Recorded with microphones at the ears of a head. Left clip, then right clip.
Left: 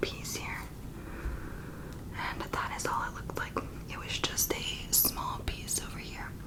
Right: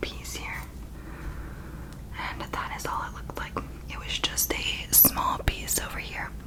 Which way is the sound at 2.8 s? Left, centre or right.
Centre.